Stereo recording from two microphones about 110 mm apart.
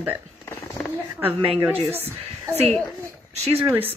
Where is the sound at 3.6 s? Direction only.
20° right (ahead or behind).